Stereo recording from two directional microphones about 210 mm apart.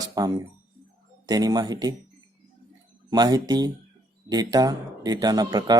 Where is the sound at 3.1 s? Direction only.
15° right (ahead or behind).